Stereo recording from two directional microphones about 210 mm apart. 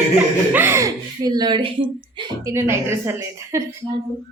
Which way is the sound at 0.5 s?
10° right (ahead or behind).